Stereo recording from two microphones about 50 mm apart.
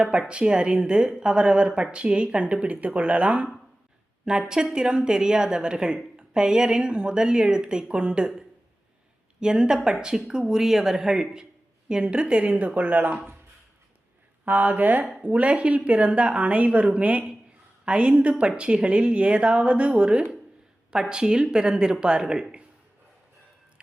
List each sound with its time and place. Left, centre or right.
0.0 s a woman's voice: centre
4.3 s a woman's voice: centre
9.4 s a woman's voice: centre; by 13.3 s right
14.4 s a woman's voice: right; by 22.4 s centre